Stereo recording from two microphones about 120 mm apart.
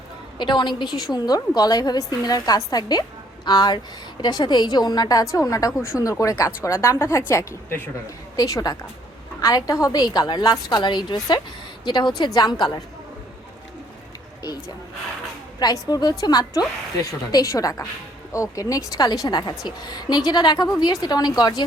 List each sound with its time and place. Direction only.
0.3 s a woman's voice: 40° left (ahead or behind)
15.5 s a woman's voice: 35° left (ahead or behind)